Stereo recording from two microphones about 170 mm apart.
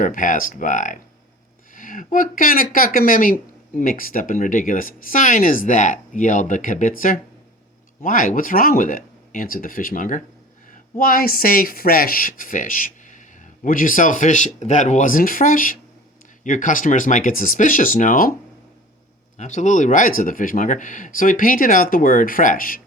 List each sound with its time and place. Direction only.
0.0 s speech: 50° left (ahead or behind)
19.4 s speech: 45° left (ahead or behind)